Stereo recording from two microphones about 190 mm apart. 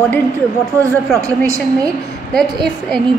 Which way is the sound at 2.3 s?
5° left (ahead or behind).